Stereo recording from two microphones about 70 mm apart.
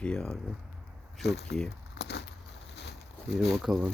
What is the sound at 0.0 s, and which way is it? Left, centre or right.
Speech, centre.